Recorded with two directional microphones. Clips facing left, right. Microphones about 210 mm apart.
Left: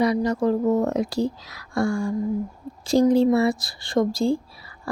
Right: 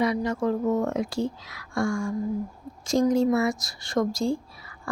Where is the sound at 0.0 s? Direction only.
35° left (ahead or behind).